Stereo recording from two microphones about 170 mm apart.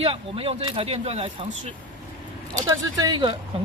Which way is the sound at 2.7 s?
20° right (ahead or behind).